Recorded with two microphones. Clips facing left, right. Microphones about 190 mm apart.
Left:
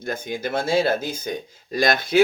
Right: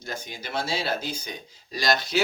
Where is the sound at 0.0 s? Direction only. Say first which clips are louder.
Left 9 dB; 55° left (ahead or behind).